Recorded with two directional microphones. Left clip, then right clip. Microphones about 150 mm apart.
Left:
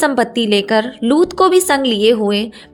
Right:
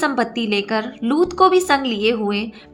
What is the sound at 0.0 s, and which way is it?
A woman's voice, 40° left (ahead or behind).